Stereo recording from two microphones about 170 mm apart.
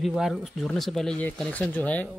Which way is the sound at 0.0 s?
Centre (ahead or behind).